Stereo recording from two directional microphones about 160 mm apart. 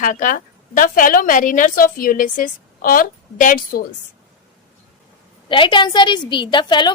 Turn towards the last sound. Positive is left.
turn(degrees=30)  # may be behind; listen again after turning